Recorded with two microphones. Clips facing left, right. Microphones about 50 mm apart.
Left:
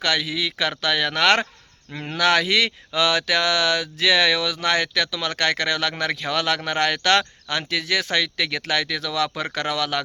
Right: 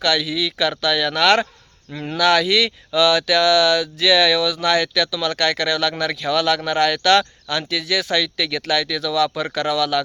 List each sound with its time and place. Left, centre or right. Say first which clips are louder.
0.0 s speech: right 3 dB; left